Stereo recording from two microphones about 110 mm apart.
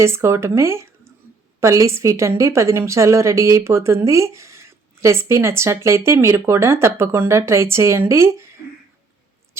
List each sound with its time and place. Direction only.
0.0 s a woman's voice: 25° right (ahead or behind)